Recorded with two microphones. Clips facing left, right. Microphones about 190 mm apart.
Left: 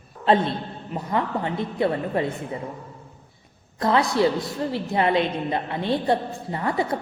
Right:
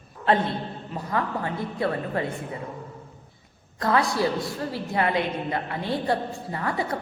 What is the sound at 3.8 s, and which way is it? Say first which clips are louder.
A woman's voice: left 3 dB; 20° left (ahead or behind).